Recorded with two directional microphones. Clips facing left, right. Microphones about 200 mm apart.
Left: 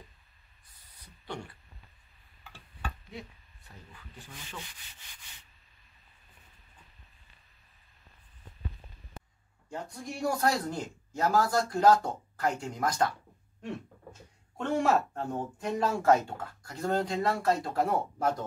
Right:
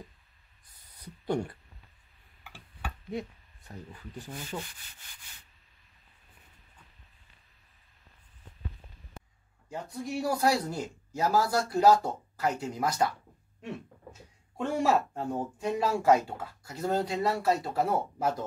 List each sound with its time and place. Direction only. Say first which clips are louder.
1.2 s speech: right 10 dB; 45° right (ahead or behind)
3.1 s a sound: right 9 dB; 45° right (ahead or behind)
9.7 s speech: right 3 dB; 5° right (ahead or behind)
14.1 s speech: right 4 dB; 10° right (ahead or behind)